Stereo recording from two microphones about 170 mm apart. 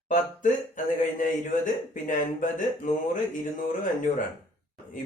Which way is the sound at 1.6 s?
50° left (ahead or behind).